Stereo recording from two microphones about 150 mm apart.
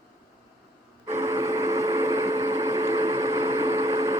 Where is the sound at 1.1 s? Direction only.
15° right (ahead or behind).